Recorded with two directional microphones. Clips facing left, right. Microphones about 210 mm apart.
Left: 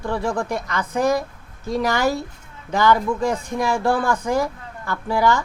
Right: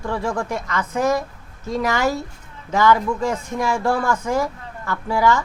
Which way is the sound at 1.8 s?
35° left (ahead or behind).